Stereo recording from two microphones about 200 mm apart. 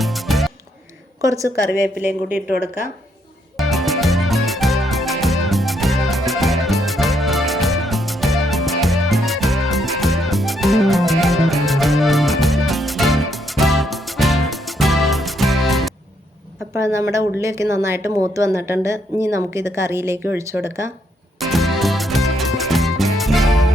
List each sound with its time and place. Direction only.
0.0 s music: centre (ahead or behind)
1.2 s speech: 15° right (ahead or behind)
3.6 s music: centre (ahead or behind)
16.7 s speech: 15° right (ahead or behind)
21.3 s music: centre (ahead or behind)